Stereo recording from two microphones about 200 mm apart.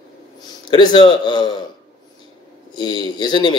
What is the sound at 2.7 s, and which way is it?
Speech, 20° left (ahead or behind).